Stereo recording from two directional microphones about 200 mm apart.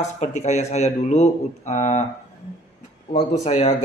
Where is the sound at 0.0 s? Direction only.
35° left (ahead or behind).